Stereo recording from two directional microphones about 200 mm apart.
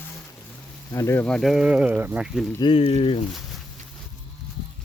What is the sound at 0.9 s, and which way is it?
Speech, 15° left (ahead or behind).